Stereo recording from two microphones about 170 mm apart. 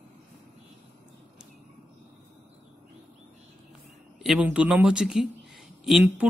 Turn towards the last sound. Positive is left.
turn(degrees=-5)  # may be behind; listen again after turning